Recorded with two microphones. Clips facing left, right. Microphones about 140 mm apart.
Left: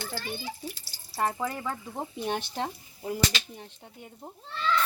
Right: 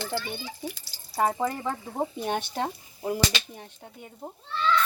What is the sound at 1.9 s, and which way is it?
Speech, 50° right (ahead or behind).